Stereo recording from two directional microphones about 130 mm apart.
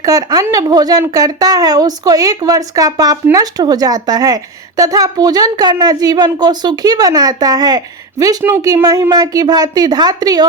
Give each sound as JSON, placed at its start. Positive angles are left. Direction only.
{"t": 0.0, "sound": "a woman's voice", "side_deg": -25}